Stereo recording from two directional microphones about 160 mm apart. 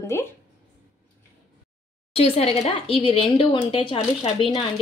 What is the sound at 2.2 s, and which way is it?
Speech, 40° left (ahead or behind).